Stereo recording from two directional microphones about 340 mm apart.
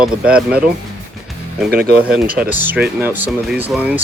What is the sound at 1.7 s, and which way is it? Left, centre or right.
Speech, right.